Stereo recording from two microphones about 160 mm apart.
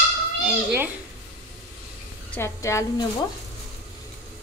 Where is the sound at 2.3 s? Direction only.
15° left (ahead or behind).